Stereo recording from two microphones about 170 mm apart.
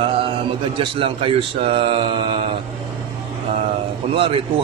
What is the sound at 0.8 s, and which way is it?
A man's voice, 30° right (ahead or behind).